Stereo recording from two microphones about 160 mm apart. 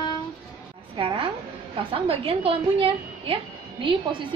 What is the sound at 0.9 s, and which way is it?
A woman's voice, 30° right (ahead or behind).